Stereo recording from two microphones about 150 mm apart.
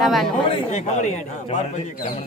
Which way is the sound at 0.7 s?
50° left (ahead or behind).